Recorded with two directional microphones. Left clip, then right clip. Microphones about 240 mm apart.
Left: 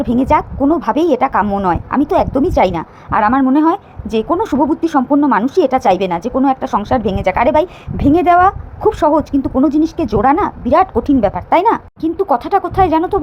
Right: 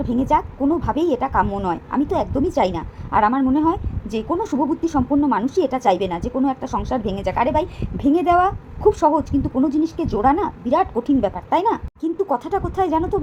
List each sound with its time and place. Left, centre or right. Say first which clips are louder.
0.0 s speech: left 6 dB; left